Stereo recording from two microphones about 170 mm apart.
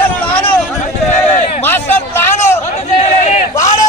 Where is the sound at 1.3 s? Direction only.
45° left (ahead or behind).